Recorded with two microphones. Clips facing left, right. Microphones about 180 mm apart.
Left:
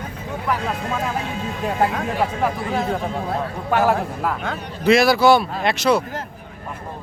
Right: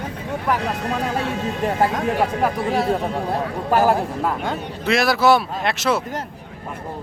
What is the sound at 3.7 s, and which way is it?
Speech, 35° right (ahead or behind).